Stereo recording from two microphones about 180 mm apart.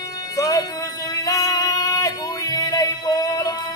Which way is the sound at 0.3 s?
20° left (ahead or behind).